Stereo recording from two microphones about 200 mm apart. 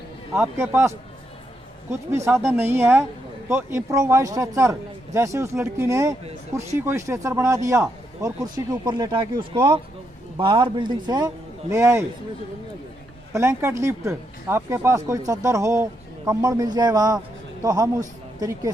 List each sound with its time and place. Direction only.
0.3 s a man's voice: 10° right (ahead or behind)
13.3 s a man's voice: 15° right (ahead or behind)